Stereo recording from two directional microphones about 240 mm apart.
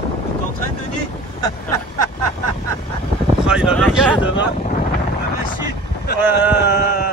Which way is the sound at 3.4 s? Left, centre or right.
Centre.